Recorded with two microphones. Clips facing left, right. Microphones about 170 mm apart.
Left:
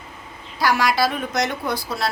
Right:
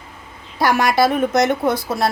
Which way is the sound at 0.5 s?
50° right (ahead or behind).